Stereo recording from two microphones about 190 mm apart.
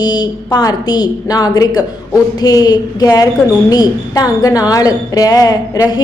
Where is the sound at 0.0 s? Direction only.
20° left (ahead or behind).